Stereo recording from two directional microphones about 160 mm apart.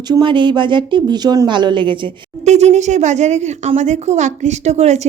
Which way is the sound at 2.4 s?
45° right (ahead or behind).